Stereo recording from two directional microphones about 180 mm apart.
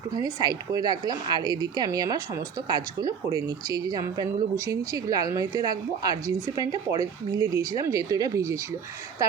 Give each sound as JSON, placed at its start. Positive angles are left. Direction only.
{"t": 0.1, "sound": "speech", "side_deg": -20}